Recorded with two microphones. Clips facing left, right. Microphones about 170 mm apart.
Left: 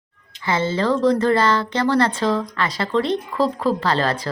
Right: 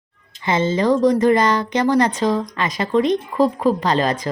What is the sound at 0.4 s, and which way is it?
Speech, 20° right (ahead or behind).